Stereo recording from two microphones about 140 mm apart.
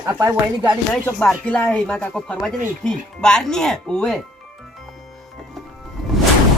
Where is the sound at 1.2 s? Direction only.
10° left (ahead or behind).